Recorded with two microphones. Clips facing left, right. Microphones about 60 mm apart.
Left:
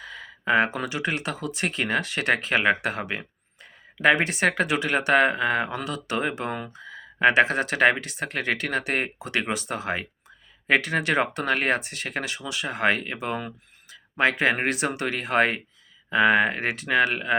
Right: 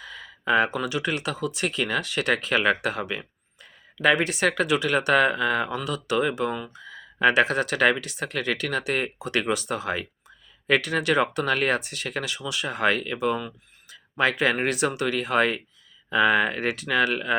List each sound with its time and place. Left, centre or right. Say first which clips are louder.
0.0 s speech: even; left